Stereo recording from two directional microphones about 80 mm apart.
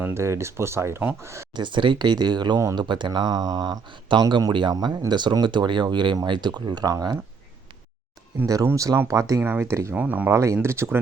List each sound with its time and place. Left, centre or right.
0.0 s speech: right
1.5 s speech: right
2.7 s speech: right
3.1 s speech: right
4.3 s speech: right
4.7 s speech: right
6.8 s speech: right
8.6 s speech: right
9.4 s speech: right
9.9 s speech: centre
10.3 s speech: right